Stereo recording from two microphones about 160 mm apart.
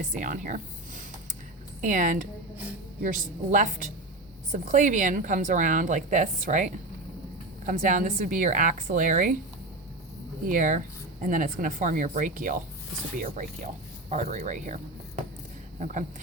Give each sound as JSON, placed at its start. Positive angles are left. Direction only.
{"t": 0.0, "sound": "a woman's voice", "side_deg": -55}
{"t": 1.8, "sound": "a woman's voice", "side_deg": -50}
{"t": 10.4, "sound": "a woman's voice", "side_deg": -55}
{"t": 15.8, "sound": "a woman's voice", "side_deg": -50}